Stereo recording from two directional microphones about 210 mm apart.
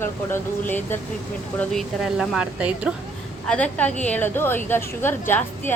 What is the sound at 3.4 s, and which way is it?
Speech, 5° left (ahead or behind).